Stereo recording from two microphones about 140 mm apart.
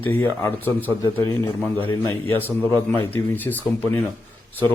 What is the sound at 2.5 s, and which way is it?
A man's voice, 15° left (ahead or behind).